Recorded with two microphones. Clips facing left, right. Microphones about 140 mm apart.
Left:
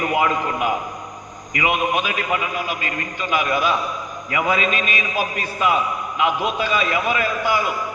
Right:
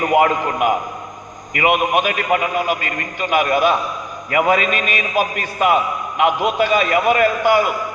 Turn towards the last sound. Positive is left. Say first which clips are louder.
# right 6 dB
turn(degrees=-55)  # may be behind; listen again after turning